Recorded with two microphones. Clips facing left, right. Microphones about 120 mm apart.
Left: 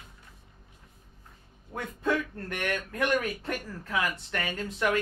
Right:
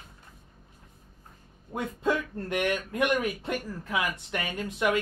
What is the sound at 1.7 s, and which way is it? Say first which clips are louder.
Speech: right 1 dB; 20° right (ahead or behind).